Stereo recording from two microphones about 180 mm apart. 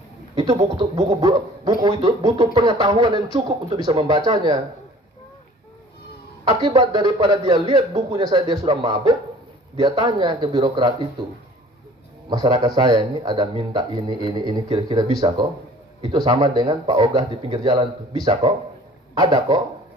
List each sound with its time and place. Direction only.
0.4 s speech: 25° right (ahead or behind)
6.5 s speech: 20° right (ahead or behind)
12.3 s speech: 25° right (ahead or behind)